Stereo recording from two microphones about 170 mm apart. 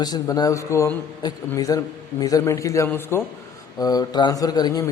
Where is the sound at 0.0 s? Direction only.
25° left (ahead or behind).